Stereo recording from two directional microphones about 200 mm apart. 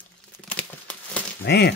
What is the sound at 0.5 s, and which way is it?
Crumpling, 5° left (ahead or behind).